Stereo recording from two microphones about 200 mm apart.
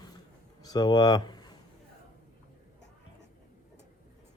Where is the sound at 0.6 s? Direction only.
20° left (ahead or behind).